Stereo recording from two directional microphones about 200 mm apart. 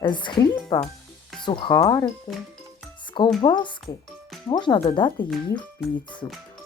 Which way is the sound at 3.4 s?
25° left (ahead or behind).